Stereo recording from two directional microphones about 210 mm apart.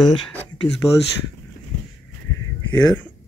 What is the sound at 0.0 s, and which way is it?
Speech, 5° left (ahead or behind).